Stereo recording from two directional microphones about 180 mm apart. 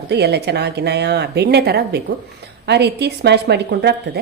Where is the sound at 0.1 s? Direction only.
70° right (ahead or behind).